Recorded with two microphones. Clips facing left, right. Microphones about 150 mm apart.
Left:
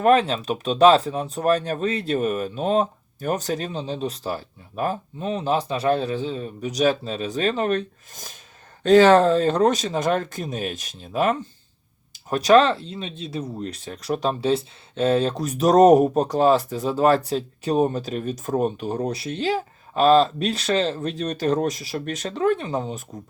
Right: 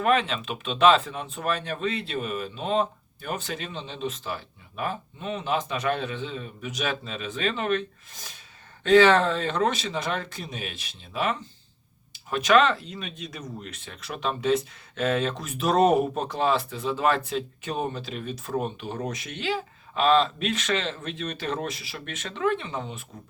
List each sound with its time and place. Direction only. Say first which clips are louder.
0.0 s speech: left 6 dB; 40° left (ahead or behind)